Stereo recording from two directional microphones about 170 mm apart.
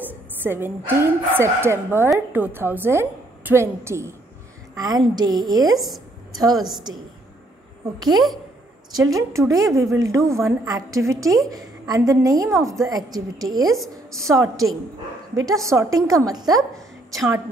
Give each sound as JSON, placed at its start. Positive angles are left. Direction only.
{"t": 0.1, "sound": "a woman's voice", "side_deg": -10}
{"t": 8.9, "sound": "a woman's voice", "side_deg": -20}